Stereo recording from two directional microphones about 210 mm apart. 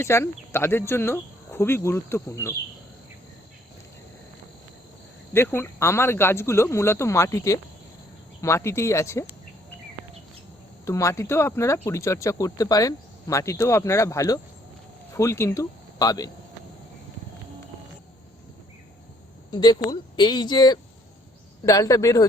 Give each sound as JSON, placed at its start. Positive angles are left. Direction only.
{"t": 0.0, "sound": "speech", "side_deg": 10}
{"t": 5.3, "sound": "speech", "side_deg": 10}
{"t": 10.8, "sound": "speech", "side_deg": 15}
{"t": 19.5, "sound": "speech", "side_deg": 20}